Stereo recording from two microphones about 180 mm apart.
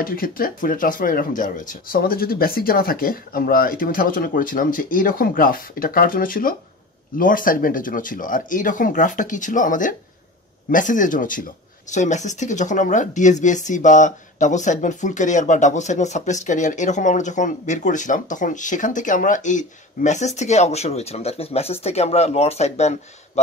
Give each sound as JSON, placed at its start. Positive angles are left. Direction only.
{"t": 0.0, "sound": "speech", "side_deg": 50}